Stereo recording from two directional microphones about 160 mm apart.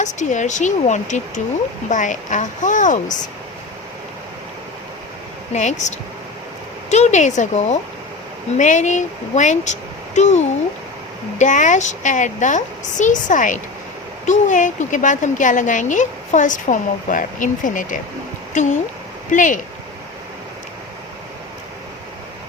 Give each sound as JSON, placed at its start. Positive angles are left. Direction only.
{"t": 0.0, "sound": "speech", "side_deg": 50}
{"t": 5.5, "sound": "speech", "side_deg": 50}
{"t": 6.9, "sound": "speech", "side_deg": 45}